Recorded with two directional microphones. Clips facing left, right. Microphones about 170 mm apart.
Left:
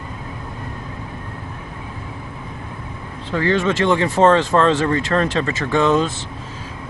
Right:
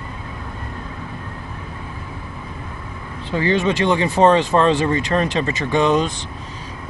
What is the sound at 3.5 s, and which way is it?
Speech, 15° right (ahead or behind).